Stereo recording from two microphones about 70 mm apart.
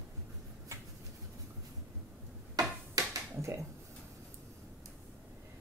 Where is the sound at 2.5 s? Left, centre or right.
Right.